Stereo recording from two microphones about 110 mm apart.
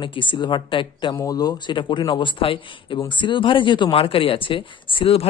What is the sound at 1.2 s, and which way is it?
Speech, 35° left (ahead or behind).